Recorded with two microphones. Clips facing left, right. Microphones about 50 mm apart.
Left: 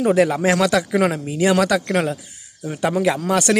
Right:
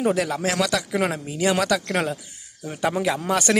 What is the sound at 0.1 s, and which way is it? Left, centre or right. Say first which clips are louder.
A man's voice: left 7 dB; centre.